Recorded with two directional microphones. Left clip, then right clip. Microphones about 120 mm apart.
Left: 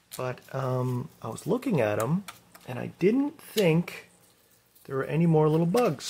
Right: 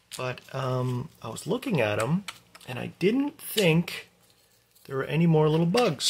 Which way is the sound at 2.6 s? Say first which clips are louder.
Left 1 dB; 20° left (ahead or behind).